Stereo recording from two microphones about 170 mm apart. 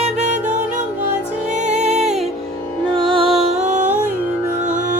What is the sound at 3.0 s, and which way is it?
Music, 30° right (ahead or behind).